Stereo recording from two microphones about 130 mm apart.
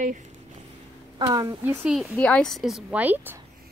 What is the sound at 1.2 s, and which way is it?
Speech, 40° right (ahead or behind).